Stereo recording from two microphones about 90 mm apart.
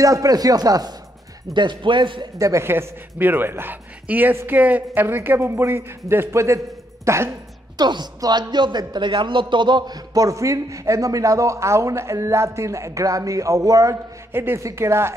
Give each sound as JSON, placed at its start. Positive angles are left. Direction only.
{"t": 0.0, "sound": "speech", "side_deg": -40}
{"t": 1.5, "sound": "speech", "side_deg": -60}
{"t": 2.3, "sound": "speech", "side_deg": -35}
{"t": 7.7, "sound": "speech", "side_deg": -55}
{"t": 14.3, "sound": "speech", "side_deg": -25}